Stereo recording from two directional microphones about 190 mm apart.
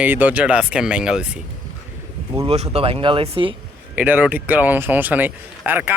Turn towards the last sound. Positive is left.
turn(degrees=-10)  # may be behind; listen again after turning